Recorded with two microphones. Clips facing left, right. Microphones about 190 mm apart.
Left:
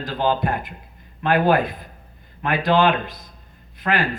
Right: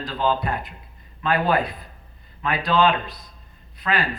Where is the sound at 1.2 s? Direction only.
50° left (ahead or behind).